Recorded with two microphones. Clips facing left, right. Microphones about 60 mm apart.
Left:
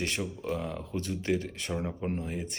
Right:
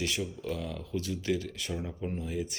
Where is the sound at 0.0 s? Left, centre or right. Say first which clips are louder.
Left 1 dB; left.